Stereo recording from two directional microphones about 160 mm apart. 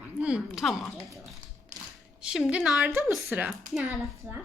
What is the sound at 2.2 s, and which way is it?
Speech, 5° right (ahead or behind).